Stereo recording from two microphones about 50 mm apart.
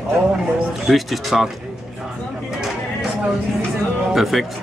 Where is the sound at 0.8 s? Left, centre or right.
Centre.